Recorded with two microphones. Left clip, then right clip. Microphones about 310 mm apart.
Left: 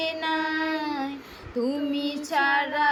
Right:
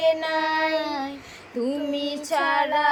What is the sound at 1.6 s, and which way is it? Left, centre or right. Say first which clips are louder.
Female singing: right 3 dB; centre.